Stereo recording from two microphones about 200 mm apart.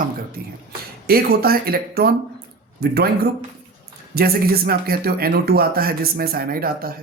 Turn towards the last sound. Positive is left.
turn(degrees=-45)  # may be behind; listen again after turning